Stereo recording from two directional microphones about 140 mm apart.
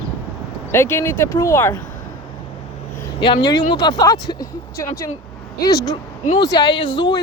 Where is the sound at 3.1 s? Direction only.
35° left (ahead or behind).